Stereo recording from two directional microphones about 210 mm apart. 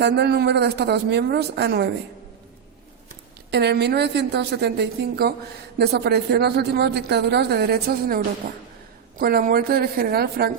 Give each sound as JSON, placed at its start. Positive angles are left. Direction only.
{"t": 0.0, "sound": "speech", "side_deg": -50}
{"t": 3.5, "sound": "speech", "side_deg": -55}
{"t": 9.1, "sound": "speech", "side_deg": -40}